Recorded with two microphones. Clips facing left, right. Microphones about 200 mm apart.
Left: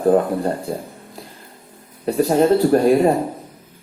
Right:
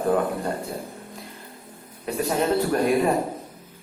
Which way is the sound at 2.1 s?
35° left (ahead or behind).